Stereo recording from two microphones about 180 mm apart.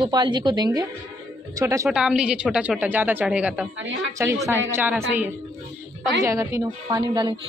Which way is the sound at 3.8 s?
90° right.